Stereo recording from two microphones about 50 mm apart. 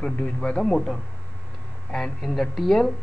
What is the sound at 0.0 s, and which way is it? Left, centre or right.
Speech, centre.